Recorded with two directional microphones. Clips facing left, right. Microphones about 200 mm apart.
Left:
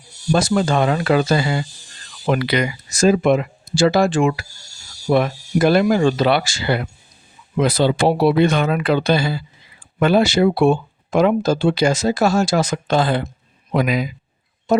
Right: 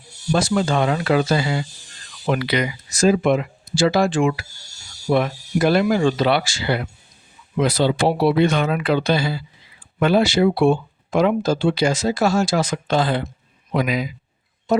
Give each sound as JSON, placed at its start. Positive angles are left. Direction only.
{"t": 0.3, "sound": "speech", "side_deg": 45}